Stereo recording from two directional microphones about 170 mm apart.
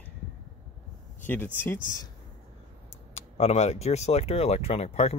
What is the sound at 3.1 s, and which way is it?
Speech, 40° left (ahead or behind).